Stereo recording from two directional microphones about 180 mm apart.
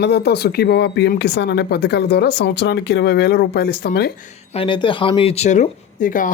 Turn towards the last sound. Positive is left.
turn(degrees=50)  # may be behind; listen again after turning